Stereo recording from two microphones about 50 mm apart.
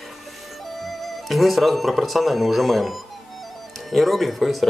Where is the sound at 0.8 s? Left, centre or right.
Centre.